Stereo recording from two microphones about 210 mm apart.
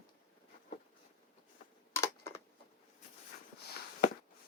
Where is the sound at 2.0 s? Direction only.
10° left (ahead or behind).